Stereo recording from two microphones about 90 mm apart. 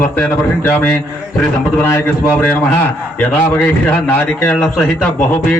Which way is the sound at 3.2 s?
15° left (ahead or behind).